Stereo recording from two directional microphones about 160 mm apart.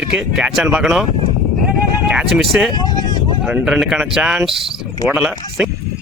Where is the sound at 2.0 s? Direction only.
5° right (ahead or behind).